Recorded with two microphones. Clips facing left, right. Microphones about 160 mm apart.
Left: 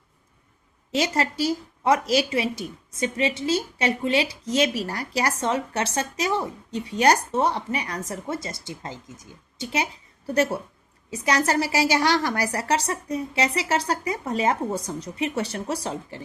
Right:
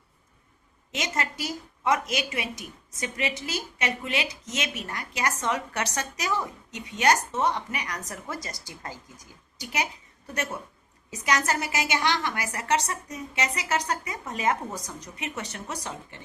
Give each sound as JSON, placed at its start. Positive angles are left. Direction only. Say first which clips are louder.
{"t": 0.9, "sound": "a woman's voice", "louder": "left 7 dB", "side_deg": 30}